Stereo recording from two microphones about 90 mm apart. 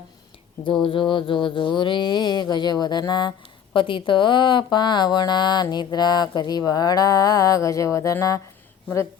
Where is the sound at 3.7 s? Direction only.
70° left (ahead or behind); by 8.3 s 40° left (ahead or behind).